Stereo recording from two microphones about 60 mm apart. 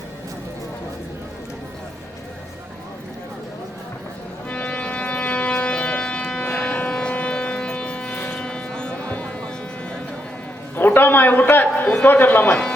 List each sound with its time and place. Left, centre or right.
4.4 s organ: left
6.5 s civil defense siren: left
8.3 s music: centre
10.8 s a man's voice: left